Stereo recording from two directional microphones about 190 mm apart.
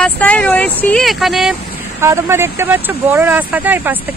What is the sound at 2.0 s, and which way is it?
Speech, 15° right (ahead or behind).